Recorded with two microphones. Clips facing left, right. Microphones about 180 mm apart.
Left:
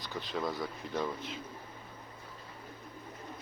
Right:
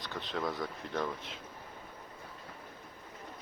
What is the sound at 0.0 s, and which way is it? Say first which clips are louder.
Speech: even; 5° left (ahead or behind).